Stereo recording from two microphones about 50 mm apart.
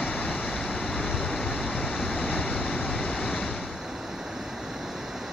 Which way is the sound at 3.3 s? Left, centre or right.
Centre.